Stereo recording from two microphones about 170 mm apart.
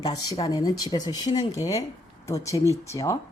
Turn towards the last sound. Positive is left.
turn(degrees=15)  # may be behind; listen again after turning